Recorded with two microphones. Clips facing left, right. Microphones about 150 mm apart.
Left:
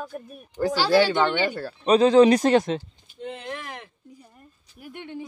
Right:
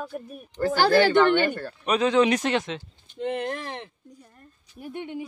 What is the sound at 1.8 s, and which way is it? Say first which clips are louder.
Speech: left 6 dB; 35° left (ahead or behind).